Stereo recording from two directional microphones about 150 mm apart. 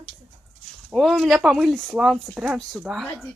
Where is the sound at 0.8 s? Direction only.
Centre (ahead or behind).